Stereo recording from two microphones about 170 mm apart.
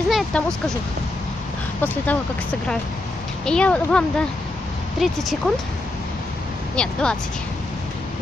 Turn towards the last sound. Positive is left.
turn(degrees=5)  # may be behind; listen again after turning